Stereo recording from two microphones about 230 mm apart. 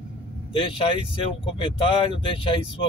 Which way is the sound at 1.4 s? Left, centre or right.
Left.